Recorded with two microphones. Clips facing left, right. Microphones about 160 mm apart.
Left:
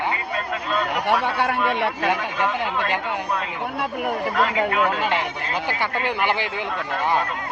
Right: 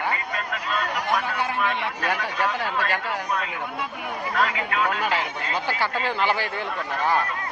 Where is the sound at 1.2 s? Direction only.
70° left (ahead or behind).